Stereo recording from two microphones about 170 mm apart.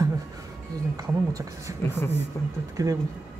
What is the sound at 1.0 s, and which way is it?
Speech, 20° right (ahead or behind).